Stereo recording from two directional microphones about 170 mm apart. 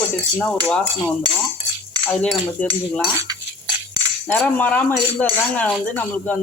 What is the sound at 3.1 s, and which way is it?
Cutlery, 20° right (ahead or behind).